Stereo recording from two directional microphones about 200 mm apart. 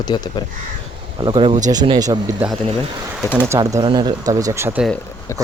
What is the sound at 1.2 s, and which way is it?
Speech, 25° right (ahead or behind).